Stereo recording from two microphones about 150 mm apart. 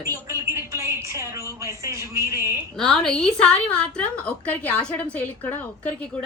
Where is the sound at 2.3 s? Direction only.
20° right (ahead or behind).